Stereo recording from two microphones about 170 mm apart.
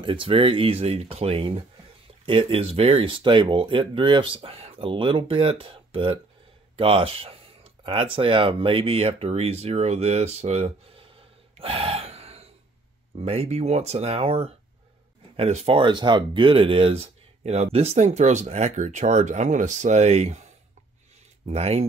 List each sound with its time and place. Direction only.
0.0 s speech: 30° right (ahead or behind)